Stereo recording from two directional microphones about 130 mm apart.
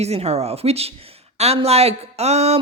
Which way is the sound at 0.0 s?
55° right (ahead or behind).